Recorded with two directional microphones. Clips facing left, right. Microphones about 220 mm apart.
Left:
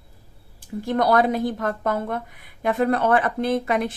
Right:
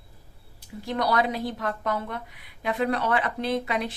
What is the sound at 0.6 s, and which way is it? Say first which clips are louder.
A woman's voice: left 6 dB; 50° left (ahead or behind).